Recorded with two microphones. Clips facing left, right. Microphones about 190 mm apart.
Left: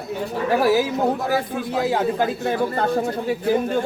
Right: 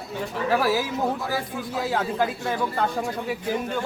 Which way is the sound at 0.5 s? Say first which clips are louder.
Left 5 dB; 20° left (ahead or behind).